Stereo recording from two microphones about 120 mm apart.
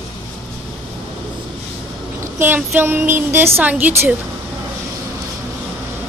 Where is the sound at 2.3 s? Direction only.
15° right (ahead or behind).